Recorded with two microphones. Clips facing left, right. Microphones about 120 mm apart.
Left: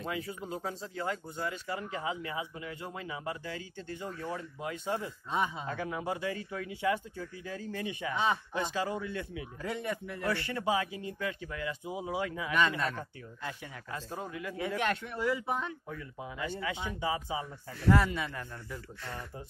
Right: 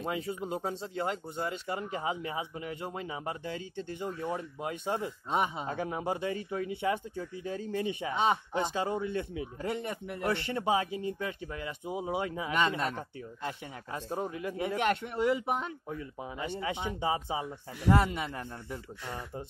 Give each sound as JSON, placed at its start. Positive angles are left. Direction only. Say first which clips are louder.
{"t": 0.0, "sound": "speech", "louder": "right 3 dB", "side_deg": -25}